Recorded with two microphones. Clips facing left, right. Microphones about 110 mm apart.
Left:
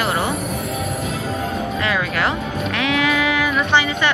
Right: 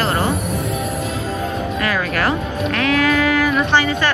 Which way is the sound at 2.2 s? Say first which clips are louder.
Right 2 dB; 20° left (ahead or behind).